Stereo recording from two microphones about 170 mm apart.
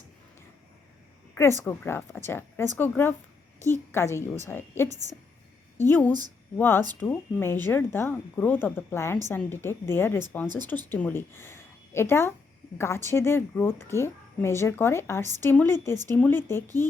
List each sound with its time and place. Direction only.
1.4 s a woman's voice: 15° left (ahead or behind)